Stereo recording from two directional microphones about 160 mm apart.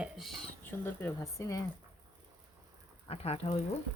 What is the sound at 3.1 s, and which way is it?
Speech, 40° left (ahead or behind).